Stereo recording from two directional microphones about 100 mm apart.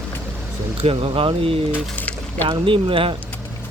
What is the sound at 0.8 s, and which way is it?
Speech, 70° right (ahead or behind).